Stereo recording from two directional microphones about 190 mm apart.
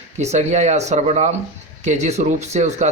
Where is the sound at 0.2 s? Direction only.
35° right (ahead or behind).